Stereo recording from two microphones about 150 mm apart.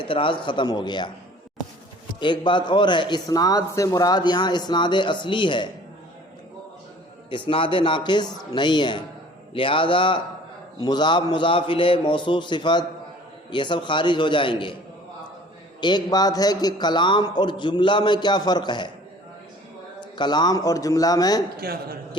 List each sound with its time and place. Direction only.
0.0 s a man's voice: 35° left (ahead or behind)
2.2 s a man's voice: 30° left (ahead or behind)
7.3 s a man's voice: 35° left (ahead or behind)
15.8 s speech: 30° left (ahead or behind)
20.0 s speech: 30° left (ahead or behind)
21.6 s a man's voice: 90° right